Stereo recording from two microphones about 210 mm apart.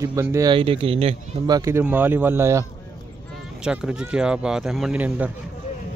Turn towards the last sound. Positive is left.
turn(degrees=-5)  # may be behind; listen again after turning